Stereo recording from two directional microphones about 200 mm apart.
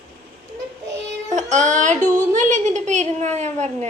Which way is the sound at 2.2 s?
40° right (ahead or behind).